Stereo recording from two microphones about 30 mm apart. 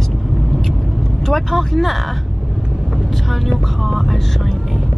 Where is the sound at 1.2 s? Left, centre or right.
Centre.